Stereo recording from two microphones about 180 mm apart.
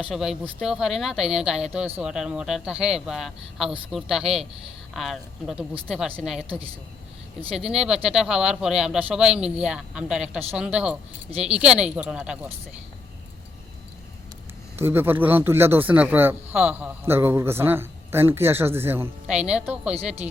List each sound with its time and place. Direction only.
0.1 s speech: 5° right (ahead or behind)
7.7 s speech: 5° right (ahead or behind)
14.8 s speech: 10° right (ahead or behind)